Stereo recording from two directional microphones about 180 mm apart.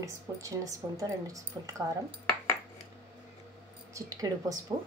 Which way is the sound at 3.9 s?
20° right (ahead or behind).